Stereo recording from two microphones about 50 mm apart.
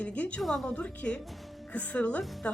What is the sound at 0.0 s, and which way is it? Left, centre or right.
Speech, left.